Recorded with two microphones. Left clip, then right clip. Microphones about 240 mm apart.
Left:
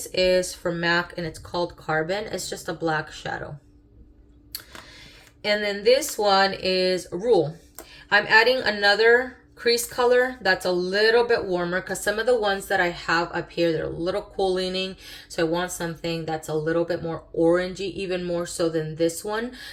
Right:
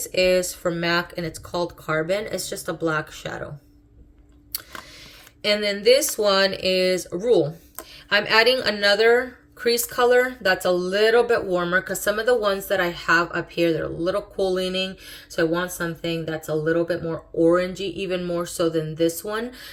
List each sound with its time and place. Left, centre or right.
0.0 s speech: centre
5.4 s speech: centre